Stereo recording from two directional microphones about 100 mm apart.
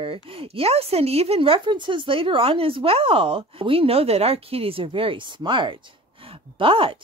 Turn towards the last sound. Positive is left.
turn(degrees=-60)  # may be behind; listen again after turning